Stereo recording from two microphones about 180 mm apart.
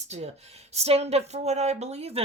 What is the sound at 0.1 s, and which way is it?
Speech, 35° right (ahead or behind).